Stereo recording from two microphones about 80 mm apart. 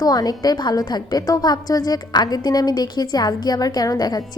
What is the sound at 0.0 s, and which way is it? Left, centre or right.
A woman's voice, left.